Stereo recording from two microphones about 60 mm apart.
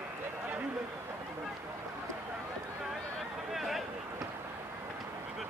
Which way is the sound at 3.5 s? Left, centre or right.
Centre.